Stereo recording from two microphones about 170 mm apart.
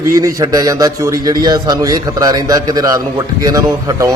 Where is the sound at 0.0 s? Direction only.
20° right (ahead or behind).